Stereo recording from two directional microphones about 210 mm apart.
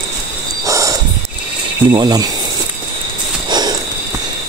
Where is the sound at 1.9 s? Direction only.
20° right (ahead or behind).